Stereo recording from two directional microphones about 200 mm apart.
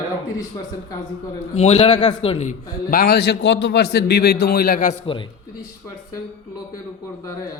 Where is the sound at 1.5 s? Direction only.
30° left (ahead or behind).